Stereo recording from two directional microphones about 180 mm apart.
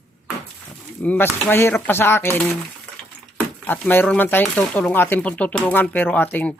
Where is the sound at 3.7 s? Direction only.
10° left (ahead or behind).